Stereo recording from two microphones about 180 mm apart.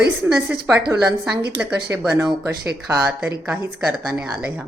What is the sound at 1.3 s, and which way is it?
Speech, 60° right (ahead or behind).